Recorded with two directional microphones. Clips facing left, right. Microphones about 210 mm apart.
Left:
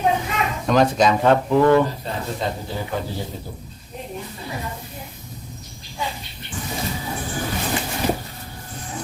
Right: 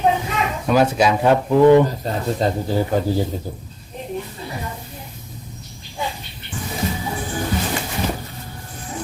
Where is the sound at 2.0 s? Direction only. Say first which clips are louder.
Right 4 dB; 40° right (ahead or behind).